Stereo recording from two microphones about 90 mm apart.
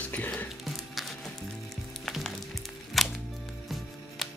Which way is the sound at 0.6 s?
Centre (ahead or behind).